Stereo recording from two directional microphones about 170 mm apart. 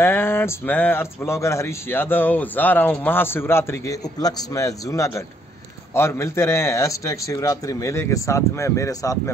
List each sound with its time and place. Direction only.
0.0 s speech: 15° left (ahead or behind)